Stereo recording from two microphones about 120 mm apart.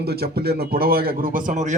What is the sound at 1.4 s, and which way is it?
Speech, 90° right.